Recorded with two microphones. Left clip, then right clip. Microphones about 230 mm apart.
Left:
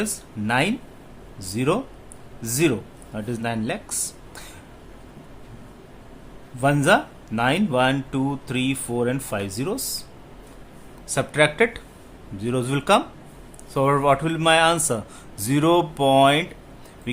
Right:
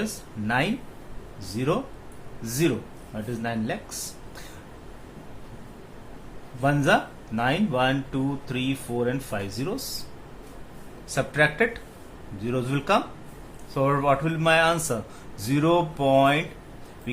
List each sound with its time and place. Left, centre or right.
0.0 s speech: left
6.6 s speech: left
11.1 s speech: left